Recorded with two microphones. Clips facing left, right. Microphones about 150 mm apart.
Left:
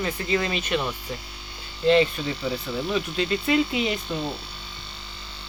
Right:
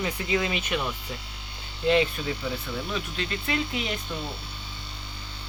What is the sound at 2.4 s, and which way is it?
Speech, 5° left (ahead or behind).